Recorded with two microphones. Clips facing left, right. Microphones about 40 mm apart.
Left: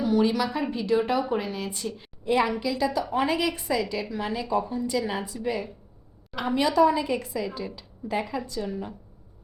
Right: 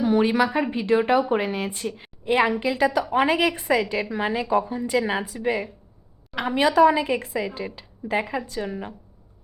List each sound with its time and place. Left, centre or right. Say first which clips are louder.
0.0 s a woman's voice: right 3 dB; right
2.0 s a sound: right 3 dB; right
2.6 s a woman's voice: right 4 dB; right
6.3 s a woman's voice: right 1 dB; right
6.6 s a woman's voice: right 4 dB; right